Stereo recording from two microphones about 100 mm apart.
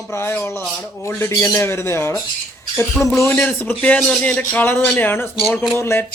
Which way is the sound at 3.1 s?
30° left (ahead or behind).